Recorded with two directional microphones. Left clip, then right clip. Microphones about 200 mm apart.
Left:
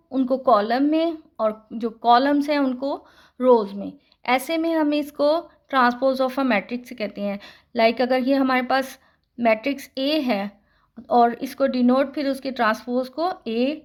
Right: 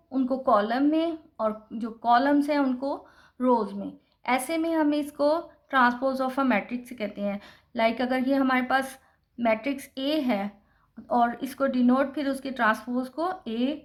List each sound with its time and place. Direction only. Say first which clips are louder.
0.1 s speech: left 5 dB; 30° left (ahead or behind)